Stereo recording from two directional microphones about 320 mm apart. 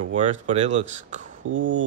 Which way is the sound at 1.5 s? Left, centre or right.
Right.